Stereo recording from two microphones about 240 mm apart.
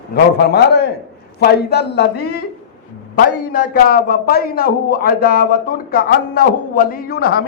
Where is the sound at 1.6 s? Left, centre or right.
Left.